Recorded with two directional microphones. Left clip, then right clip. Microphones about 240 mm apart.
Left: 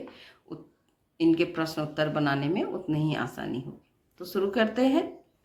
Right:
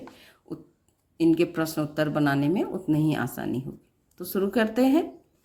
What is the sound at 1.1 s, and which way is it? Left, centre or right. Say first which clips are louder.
Speech: right 2 dB; right.